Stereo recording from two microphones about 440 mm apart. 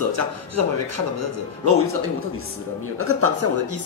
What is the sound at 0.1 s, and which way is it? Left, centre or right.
Speech, right.